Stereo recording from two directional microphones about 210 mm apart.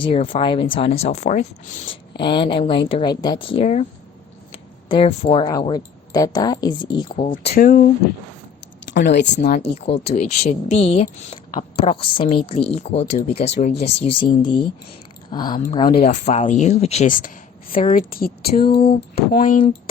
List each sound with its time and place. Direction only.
0.0 s speech: 25° left (ahead or behind)
2.1 s speech: 20° left (ahead or behind)
4.9 s speech: 25° left (ahead or behind)
7.3 s speech: 45° left (ahead or behind)
8.9 s speech: 55° left (ahead or behind)
9.7 s speech: 30° left (ahead or behind)
16.0 s speech: 35° left (ahead or behind)